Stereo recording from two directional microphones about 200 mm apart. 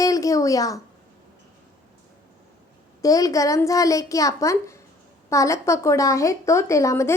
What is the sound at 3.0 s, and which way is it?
A woman's voice, 15° left (ahead or behind).